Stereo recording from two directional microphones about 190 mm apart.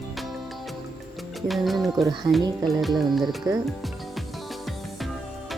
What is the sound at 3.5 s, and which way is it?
Speech, 20° right (ahead or behind).